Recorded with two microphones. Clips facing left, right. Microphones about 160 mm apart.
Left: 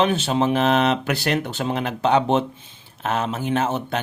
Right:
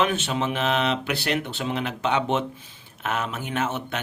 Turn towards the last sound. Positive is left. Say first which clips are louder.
# left 5 dB
turn(degrees=35)  # may be behind; listen again after turning